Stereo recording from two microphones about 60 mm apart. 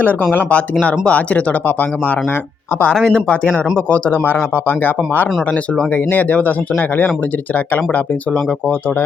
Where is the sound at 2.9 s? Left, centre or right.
Centre; by 5.0 s left.